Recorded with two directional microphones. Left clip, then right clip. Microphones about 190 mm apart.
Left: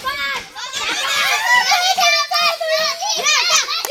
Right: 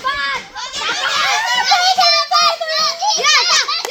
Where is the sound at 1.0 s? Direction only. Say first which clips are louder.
Even; 35° left (ahead or behind).